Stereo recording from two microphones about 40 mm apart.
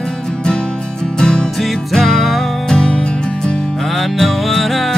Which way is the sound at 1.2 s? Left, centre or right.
Left.